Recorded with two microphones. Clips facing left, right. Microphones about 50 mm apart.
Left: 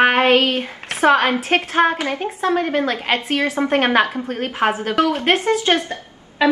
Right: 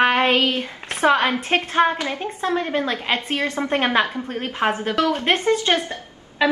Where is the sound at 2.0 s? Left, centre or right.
Left.